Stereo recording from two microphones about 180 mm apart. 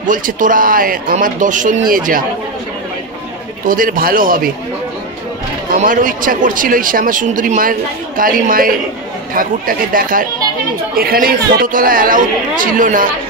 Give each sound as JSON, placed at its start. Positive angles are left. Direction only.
{"t": 0.0, "sound": "a man's voice", "side_deg": -45}
{"t": 3.6, "sound": "a man's voice", "side_deg": -50}
{"t": 5.7, "sound": "a man's voice", "side_deg": -45}